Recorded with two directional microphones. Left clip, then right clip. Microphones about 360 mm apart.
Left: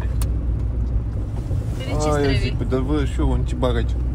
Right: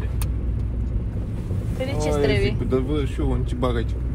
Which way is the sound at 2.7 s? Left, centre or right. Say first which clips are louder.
Left 1 dB; centre.